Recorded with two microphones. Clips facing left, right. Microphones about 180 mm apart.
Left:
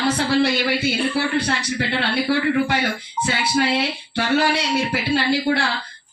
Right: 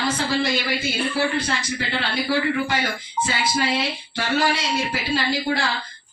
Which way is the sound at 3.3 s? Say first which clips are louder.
Left 4 dB; 65° left (ahead or behind).